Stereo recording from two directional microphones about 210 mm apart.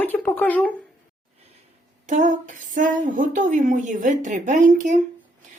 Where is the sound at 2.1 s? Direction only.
35° right (ahead or behind).